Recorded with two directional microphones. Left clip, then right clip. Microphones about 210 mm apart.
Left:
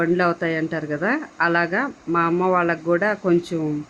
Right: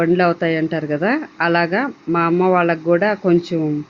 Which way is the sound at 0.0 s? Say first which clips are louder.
Right 4 dB; 5° right (ahead or behind).